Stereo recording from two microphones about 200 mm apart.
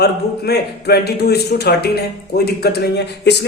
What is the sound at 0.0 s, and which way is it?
A man's voice, 55° left (ahead or behind).